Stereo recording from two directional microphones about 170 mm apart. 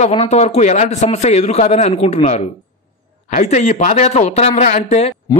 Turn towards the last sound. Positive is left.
turn(degrees=40)  # may be behind; listen again after turning